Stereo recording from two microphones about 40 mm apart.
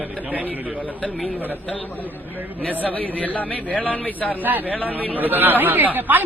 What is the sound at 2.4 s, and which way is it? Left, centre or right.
Speech, right.